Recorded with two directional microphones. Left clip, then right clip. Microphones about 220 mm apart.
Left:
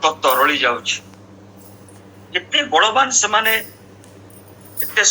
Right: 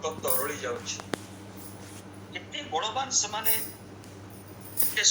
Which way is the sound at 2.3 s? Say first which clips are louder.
Left 16 dB; 35° left (ahead or behind).